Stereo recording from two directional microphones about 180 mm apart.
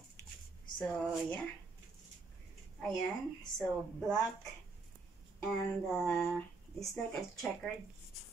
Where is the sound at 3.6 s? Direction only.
Centre (ahead or behind).